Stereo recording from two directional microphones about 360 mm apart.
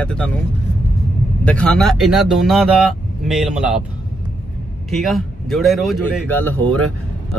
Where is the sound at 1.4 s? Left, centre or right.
Centre.